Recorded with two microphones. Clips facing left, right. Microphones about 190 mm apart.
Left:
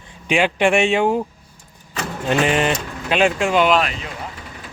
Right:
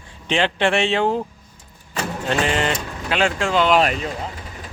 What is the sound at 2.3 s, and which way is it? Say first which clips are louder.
A man's voice: left 3 dB; 15° left (ahead or behind).